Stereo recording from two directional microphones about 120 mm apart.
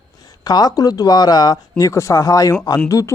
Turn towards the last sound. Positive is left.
turn(degrees=25)  # may be behind; listen again after turning